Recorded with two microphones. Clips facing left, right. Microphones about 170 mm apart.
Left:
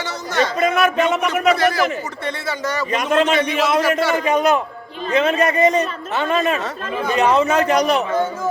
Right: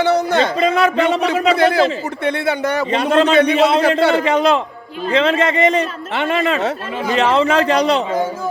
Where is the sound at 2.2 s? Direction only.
60° right (ahead or behind).